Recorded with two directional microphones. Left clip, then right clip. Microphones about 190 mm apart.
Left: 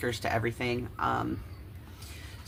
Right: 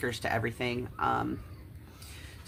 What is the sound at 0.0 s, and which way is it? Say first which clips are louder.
Speech: left 1 dB; 15° right (ahead or behind).